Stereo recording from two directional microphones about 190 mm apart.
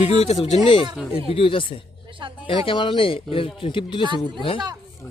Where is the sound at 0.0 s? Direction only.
35° left (ahead or behind).